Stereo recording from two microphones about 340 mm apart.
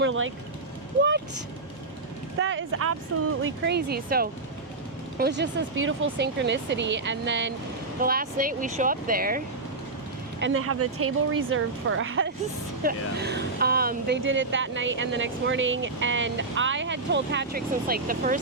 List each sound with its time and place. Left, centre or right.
0.0 s speech: right
2.4 s speech: right
3.4 s speech: right
10.4 s speech: right